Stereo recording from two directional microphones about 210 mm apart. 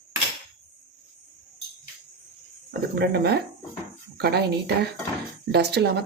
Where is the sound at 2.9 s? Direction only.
50° right (ahead or behind).